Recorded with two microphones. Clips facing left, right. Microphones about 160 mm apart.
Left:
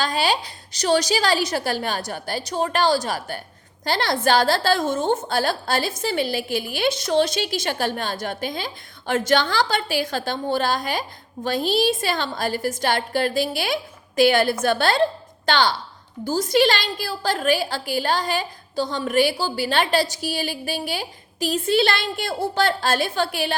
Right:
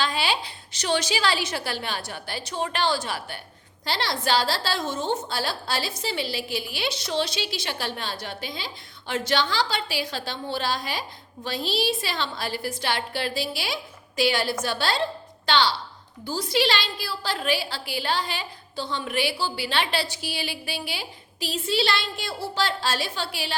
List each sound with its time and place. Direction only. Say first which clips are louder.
0.0 s a woman's voice: left 4 dB; 40° left (ahead or behind)